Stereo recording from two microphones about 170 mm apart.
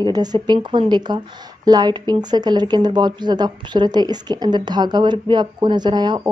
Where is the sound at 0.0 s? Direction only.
25° right (ahead or behind).